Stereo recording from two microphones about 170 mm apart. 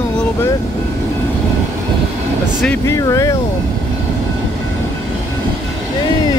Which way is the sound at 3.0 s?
20° left (ahead or behind).